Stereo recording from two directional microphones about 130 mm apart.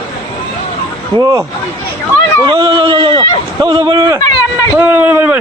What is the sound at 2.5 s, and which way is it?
Speech, 35° right (ahead or behind).